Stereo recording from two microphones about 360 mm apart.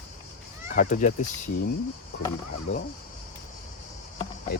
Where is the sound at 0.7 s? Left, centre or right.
Left.